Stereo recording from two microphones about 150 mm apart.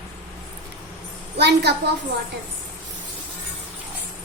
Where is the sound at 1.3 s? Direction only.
90° right.